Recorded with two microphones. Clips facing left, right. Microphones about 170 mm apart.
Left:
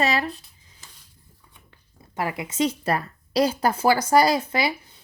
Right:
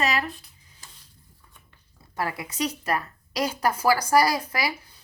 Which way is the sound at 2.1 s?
20° left (ahead or behind).